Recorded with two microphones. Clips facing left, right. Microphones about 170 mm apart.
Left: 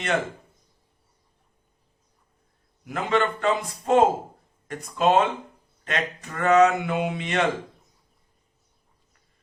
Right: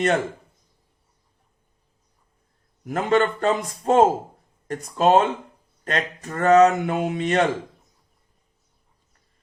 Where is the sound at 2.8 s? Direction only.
45° right (ahead or behind).